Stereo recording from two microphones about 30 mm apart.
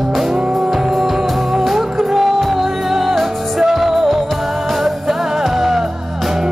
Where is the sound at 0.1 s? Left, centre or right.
Centre.